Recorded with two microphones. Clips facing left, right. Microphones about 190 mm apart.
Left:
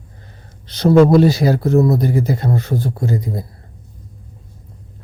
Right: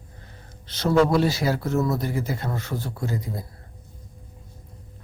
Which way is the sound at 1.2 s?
40° left (ahead or behind).